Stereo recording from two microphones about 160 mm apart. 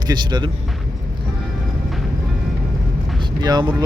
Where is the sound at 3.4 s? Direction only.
25° right (ahead or behind).